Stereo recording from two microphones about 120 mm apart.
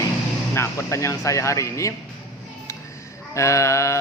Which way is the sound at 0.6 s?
25° left (ahead or behind).